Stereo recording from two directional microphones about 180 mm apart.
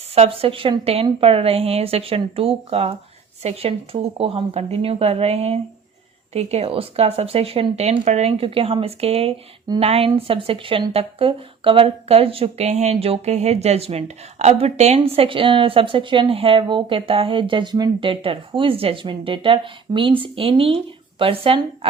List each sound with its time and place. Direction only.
0.1 s a woman's voice: 30° right (ahead or behind)